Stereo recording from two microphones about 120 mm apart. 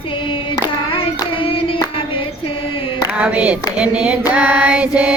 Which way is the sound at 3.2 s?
10° right (ahead or behind).